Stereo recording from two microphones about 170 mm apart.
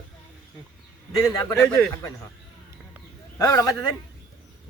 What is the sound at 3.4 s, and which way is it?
Speech, 20° left (ahead or behind).